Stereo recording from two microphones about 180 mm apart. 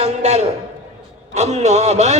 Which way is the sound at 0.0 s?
35° right (ahead or behind).